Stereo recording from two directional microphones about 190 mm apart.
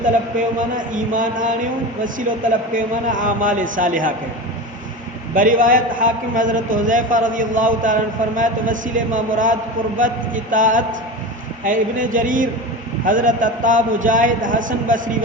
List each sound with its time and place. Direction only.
0.3 s a man's voice: 45° right (ahead or behind)
2.7 s a man's voice: 45° right (ahead or behind)
5.3 s a man's voice: 45° right (ahead or behind)